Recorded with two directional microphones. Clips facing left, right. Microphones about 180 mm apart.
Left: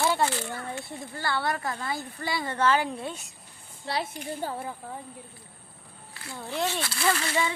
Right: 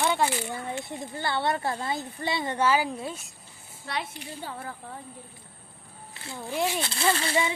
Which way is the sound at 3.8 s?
35° left (ahead or behind).